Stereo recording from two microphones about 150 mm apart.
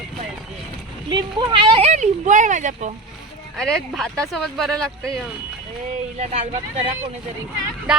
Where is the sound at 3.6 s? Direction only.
Centre (ahead or behind).